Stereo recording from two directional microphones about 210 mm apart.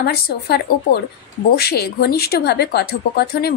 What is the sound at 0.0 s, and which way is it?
A woman's voice, 50° left (ahead or behind).